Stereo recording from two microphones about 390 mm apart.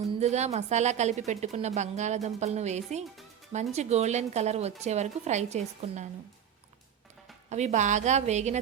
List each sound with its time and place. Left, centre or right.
0.2 s a woman's voice: centre
7.5 s a woman's voice: centre